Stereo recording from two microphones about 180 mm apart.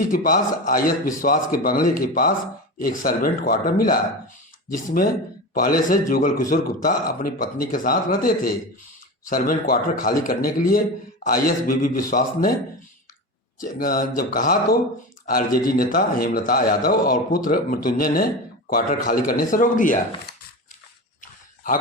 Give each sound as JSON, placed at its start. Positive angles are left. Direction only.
{"t": 0.0, "sound": "a man's voice", "side_deg": 50}
{"t": 13.6, "sound": "a man's voice", "side_deg": 50}
{"t": 21.2, "sound": "a sound", "side_deg": 45}